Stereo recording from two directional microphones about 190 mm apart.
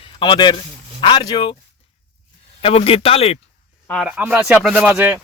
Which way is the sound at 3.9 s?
Centre (ahead or behind).